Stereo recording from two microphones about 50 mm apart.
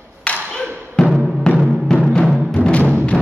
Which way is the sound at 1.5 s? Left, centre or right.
Centre.